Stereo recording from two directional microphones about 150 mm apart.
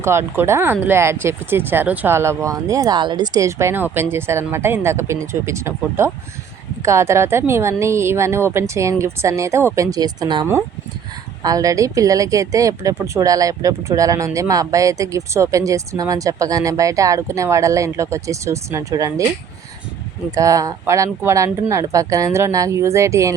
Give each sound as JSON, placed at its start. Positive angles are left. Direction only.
{"t": 0.0, "sound": "speech", "side_deg": -15}
{"t": 11.4, "sound": "a woman's voice", "side_deg": -25}
{"t": 20.3, "sound": "a woman's voice", "side_deg": -20}